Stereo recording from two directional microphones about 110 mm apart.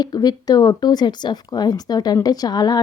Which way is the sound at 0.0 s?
35° left (ahead or behind).